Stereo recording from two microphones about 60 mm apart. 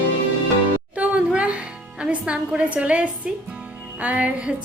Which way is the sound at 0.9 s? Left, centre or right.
Right.